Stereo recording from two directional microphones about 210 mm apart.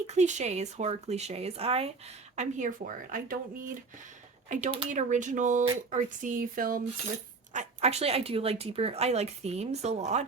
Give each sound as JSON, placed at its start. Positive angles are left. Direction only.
{"t": 0.1, "sound": "speech", "side_deg": -35}
{"t": 4.7, "sound": "speech", "side_deg": -25}
{"t": 4.9, "sound": "speech", "side_deg": -35}
{"t": 7.5, "sound": "speech", "side_deg": -30}